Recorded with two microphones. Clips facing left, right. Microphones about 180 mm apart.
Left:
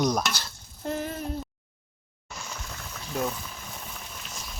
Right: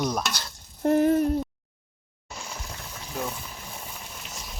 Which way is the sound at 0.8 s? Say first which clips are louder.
Right 10 dB; 65° right (ahead or behind).